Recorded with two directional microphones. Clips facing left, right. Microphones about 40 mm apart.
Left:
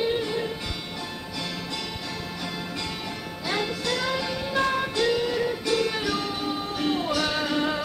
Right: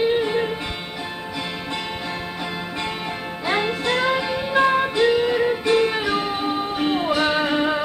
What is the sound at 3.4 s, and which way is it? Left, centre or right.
Music, right.